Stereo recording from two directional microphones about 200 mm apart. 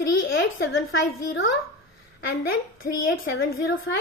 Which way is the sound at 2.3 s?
50° left (ahead or behind).